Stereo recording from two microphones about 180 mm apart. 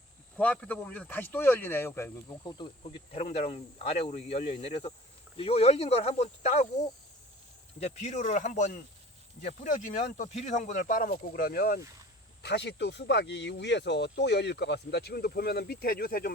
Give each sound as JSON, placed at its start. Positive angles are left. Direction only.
{"t": 0.3, "sound": "speech", "side_deg": 5}
{"t": 2.4, "sound": "insect", "side_deg": 25}
{"t": 3.2, "sound": "speech", "side_deg": 35}
{"t": 7.8, "sound": "speech", "side_deg": 40}
{"t": 12.4, "sound": "speech", "side_deg": 70}